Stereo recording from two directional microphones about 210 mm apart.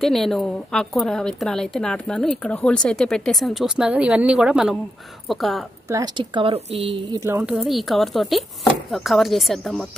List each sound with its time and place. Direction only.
0.0 s a woman's voice: centre (ahead or behind)
5.9 s speech: 15° right (ahead or behind)
7.1 s a sound: 15° right (ahead or behind)
7.5 s a woman's voice: centre (ahead or behind)